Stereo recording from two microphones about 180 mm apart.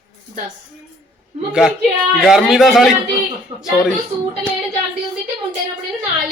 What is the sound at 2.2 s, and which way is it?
A man's voice, centre (ahead or behind).